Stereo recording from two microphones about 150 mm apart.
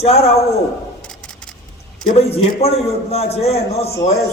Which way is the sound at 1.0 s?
5° left (ahead or behind).